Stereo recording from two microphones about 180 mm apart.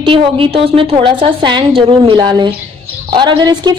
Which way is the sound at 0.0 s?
30° right (ahead or behind).